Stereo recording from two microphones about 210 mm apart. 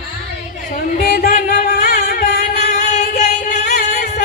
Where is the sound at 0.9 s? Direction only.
50° left (ahead or behind).